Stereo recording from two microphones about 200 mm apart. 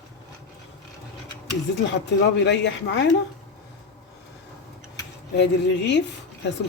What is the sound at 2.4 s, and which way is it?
Speech, 60° left (ahead or behind).